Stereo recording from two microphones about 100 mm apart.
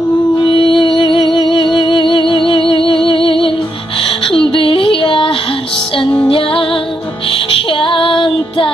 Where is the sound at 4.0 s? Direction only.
65° left (ahead or behind).